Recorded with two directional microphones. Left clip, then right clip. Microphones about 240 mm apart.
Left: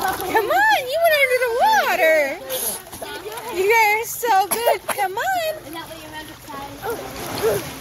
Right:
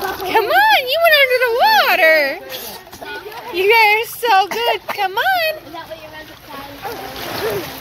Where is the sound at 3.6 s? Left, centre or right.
Centre.